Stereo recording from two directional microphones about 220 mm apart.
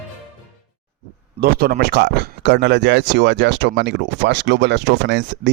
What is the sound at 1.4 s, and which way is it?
Speech, 45° right (ahead or behind).